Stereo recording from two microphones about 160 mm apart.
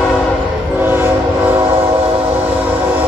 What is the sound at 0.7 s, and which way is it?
Train, 15° right (ahead or behind).